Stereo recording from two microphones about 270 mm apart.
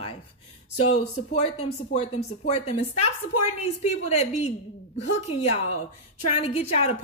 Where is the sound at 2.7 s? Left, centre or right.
Left.